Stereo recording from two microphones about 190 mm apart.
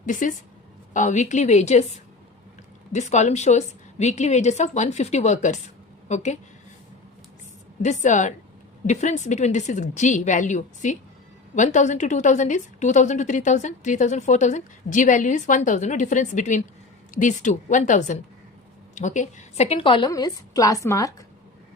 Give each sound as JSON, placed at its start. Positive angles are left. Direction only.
{"t": 0.0, "sound": "a woman's voice", "side_deg": 45}
{"t": 7.8, "sound": "a woman's voice", "side_deg": 40}